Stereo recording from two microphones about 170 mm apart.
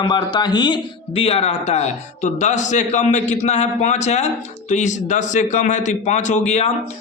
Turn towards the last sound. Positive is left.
turn(degrees=40)  # may be behind; listen again after turning